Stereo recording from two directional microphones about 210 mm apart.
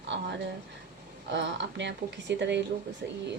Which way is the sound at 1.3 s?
55° right (ahead or behind).